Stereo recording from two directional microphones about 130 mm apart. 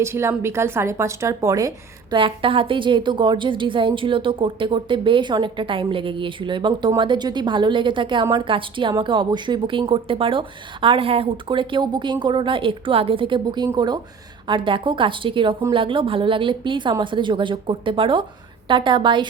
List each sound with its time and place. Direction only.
0.0 s a woman's voice: 20° right (ahead or behind)
2.1 s a woman's voice: 40° right (ahead or behind)